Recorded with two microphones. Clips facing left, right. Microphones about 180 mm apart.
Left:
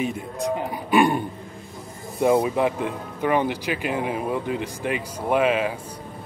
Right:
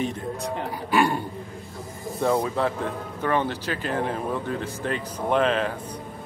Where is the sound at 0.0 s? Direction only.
10° left (ahead or behind).